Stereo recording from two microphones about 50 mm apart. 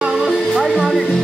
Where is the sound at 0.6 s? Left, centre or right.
Centre.